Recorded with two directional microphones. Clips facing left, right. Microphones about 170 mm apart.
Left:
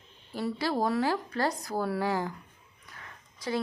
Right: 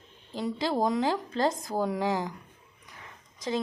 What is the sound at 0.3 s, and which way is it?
Speech, 20° right (ahead or behind).